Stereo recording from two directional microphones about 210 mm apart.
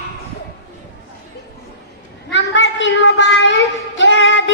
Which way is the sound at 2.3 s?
60° left (ahead or behind).